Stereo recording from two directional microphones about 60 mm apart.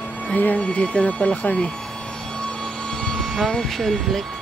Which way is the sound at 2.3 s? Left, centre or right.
Centre.